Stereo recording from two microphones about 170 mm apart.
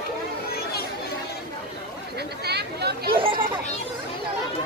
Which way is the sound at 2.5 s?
75° right (ahead or behind).